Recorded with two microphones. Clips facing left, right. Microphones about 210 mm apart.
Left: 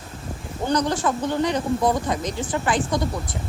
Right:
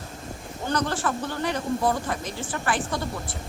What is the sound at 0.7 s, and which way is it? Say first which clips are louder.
Speech: left 4 dB; 15° left (ahead or behind).